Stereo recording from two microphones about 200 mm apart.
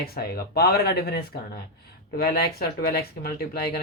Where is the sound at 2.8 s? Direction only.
50° left (ahead or behind).